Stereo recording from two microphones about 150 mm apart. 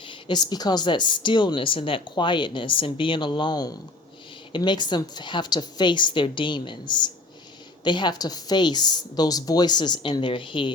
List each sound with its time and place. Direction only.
0.1 s a woman's voice: 30° left (ahead or behind)